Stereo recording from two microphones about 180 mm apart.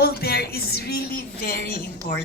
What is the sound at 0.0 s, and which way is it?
A woman's voice, 60° left (ahead or behind).